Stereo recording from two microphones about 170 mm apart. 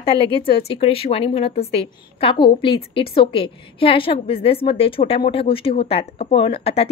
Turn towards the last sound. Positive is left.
turn(degrees=35)  # may be behind; listen again after turning